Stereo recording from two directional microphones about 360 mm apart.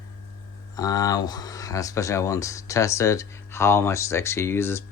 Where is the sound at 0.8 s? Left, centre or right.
Centre.